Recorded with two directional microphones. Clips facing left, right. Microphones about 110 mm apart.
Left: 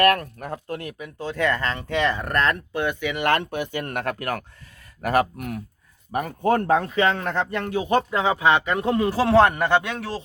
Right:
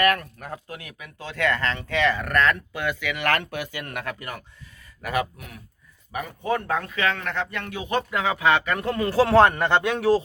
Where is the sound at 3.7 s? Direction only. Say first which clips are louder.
Left 5 dB; 35° left (ahead or behind).